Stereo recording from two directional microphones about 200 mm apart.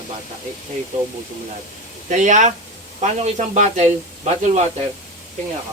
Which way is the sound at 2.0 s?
40° right (ahead or behind).